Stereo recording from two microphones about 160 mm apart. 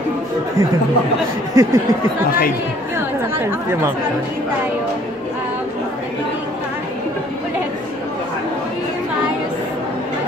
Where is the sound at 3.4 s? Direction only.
15° right (ahead or behind).